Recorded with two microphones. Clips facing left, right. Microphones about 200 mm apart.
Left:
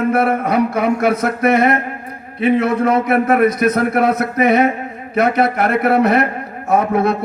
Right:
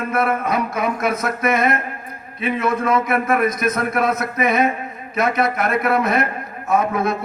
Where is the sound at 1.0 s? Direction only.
65° left (ahead or behind).